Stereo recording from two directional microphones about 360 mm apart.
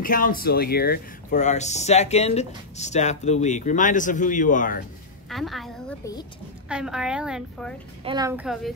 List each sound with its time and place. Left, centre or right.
0.0 s speech: left
5.3 s a woman's voice: centre